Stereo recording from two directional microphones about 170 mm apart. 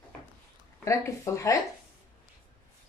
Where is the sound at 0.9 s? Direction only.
20° left (ahead or behind).